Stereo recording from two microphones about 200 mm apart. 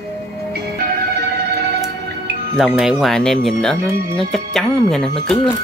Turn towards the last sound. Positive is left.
turn(degrees=5)  # may be behind; listen again after turning